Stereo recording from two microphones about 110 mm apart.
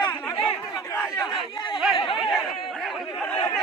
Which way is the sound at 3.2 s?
10° left (ahead or behind).